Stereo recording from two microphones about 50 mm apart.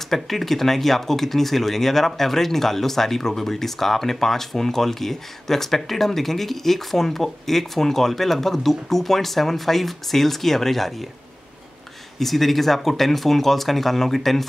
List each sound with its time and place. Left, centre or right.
0.1 s speech: centre
12.2 s speech: centre